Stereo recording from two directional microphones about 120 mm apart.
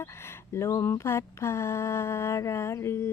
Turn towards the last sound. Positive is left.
turn(degrees=20)  # may be behind; listen again after turning